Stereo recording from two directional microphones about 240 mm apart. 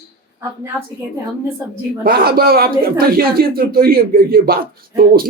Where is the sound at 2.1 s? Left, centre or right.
Right.